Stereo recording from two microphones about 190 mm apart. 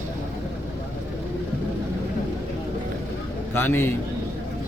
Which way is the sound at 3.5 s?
10° left (ahead or behind).